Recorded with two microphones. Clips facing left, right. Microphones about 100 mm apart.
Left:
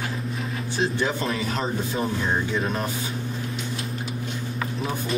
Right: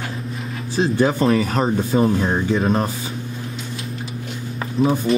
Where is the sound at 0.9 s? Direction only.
40° right (ahead or behind).